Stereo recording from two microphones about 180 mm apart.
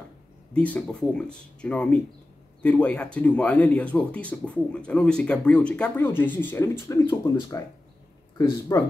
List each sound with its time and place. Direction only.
0.5 s speech: 10° left (ahead or behind)